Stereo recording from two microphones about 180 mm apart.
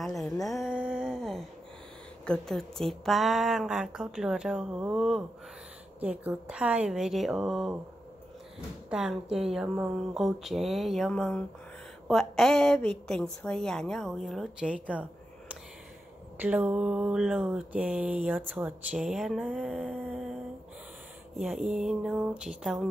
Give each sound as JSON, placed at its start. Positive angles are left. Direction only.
{"t": 0.0, "sound": "a sound", "side_deg": 0}
{"t": 2.2, "sound": "speech", "side_deg": 5}
{"t": 8.9, "sound": "speech", "side_deg": -5}
{"t": 16.3, "sound": "speech", "side_deg": -10}
{"t": 21.4, "sound": "speech", "side_deg": 0}